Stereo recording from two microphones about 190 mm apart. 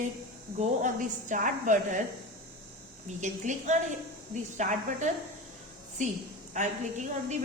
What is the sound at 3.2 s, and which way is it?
A woman's voice, 40° right (ahead or behind).